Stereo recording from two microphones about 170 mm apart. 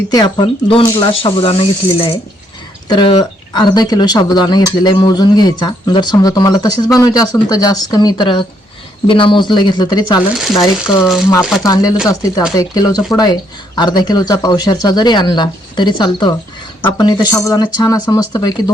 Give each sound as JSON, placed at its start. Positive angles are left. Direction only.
{"t": 0.1, "sound": "speech", "side_deg": 25}
{"t": 11.0, "sound": "speech", "side_deg": 0}
{"t": 11.6, "sound": "speech", "side_deg": 20}